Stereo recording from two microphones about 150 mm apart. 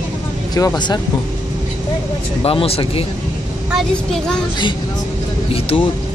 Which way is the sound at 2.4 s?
40° left (ahead or behind).